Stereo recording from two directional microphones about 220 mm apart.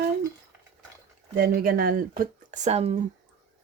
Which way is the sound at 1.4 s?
40° right (ahead or behind).